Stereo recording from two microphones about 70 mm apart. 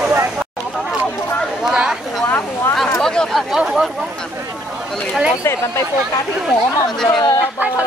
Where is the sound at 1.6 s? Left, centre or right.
Centre.